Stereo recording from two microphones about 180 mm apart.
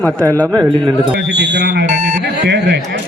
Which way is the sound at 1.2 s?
70° right (ahead or behind).